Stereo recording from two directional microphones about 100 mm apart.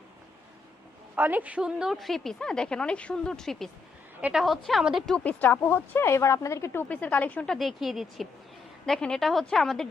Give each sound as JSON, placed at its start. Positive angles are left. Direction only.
{"t": 1.1, "sound": "a woman's voice", "side_deg": -15}
{"t": 5.0, "sound": "speech", "side_deg": 10}
{"t": 6.8, "sound": "speech", "side_deg": 15}
{"t": 7.4, "sound": "a woman's voice", "side_deg": 5}